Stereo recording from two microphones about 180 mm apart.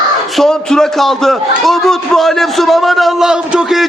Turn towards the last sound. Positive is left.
turn(degrees=-5)  # may be behind; listen again after turning